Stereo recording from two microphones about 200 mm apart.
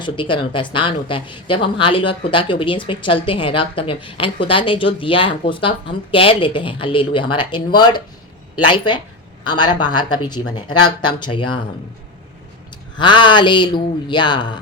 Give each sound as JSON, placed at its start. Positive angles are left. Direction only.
{"t": 0.0, "sound": "a woman's voice", "side_deg": 25}
{"t": 13.0, "sound": "a woman's voice", "side_deg": 25}